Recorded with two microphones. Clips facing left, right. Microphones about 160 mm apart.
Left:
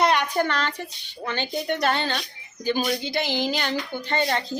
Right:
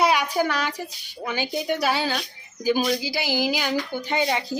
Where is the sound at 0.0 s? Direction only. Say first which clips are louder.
Even; 5° right (ahead or behind).